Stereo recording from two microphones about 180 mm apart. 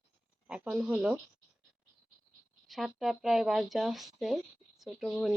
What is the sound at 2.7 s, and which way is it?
Speech, centre (ahead or behind).